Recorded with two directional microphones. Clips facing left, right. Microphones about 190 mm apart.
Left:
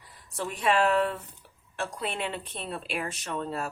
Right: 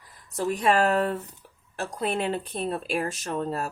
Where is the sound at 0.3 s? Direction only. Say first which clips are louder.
Right 3 dB; 40° right (ahead or behind).